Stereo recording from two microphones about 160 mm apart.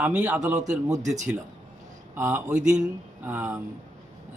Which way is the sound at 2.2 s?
15° right (ahead or behind).